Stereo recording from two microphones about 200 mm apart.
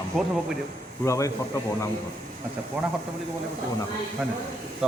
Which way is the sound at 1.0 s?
15° left (ahead or behind).